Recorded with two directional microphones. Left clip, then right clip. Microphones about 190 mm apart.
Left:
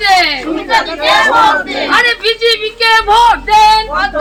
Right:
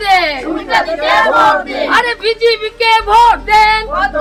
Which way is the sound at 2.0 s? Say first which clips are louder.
Left 1 dB; 30° right (ahead or behind).